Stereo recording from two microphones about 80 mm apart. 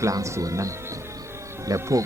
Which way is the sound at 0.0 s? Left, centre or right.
Right.